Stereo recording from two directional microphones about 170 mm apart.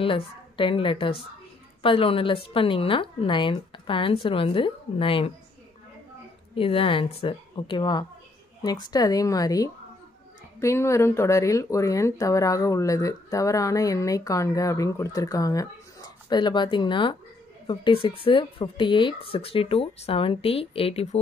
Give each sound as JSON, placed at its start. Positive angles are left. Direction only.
{"t": 0.0, "sound": "a woman's voice", "side_deg": 30}
{"t": 6.5, "sound": "a woman's voice", "side_deg": 30}